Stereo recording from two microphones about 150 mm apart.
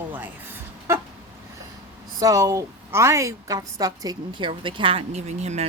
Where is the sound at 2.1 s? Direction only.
20° right (ahead or behind).